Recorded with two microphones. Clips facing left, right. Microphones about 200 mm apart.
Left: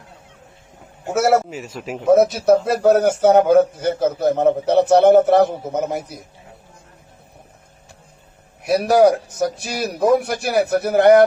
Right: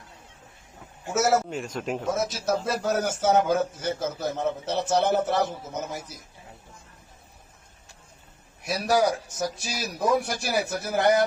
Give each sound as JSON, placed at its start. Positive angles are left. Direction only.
{"t": 1.0, "sound": "a man's voice", "side_deg": 60}
{"t": 1.5, "sound": "speech", "side_deg": 5}
{"t": 2.0, "sound": "a man's voice", "side_deg": 60}
{"t": 8.6, "sound": "a man's voice", "side_deg": 60}